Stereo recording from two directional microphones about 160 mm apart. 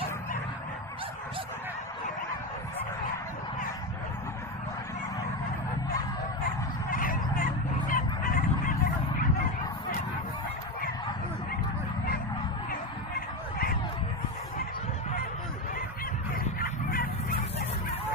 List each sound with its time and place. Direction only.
6.9 s honk: 60° left (ahead or behind)
16.3 s dog: 65° left (ahead or behind)